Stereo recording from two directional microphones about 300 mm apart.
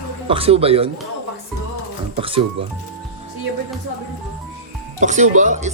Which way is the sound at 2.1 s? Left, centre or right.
Centre.